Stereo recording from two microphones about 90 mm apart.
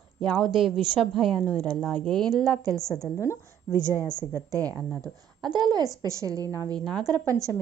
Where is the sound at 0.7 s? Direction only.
60° right (ahead or behind).